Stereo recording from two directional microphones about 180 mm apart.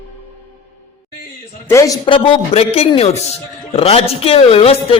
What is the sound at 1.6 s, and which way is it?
A man's voice, 15° left (ahead or behind).